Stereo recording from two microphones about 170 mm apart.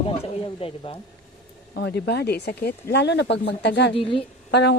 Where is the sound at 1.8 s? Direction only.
80° left.